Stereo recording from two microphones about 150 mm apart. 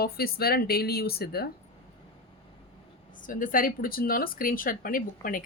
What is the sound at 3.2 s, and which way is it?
Speech, 65° left (ahead or behind).